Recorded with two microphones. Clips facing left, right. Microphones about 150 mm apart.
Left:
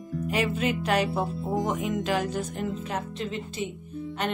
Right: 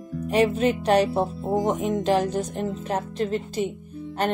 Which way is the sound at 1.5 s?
Centre (ahead or behind).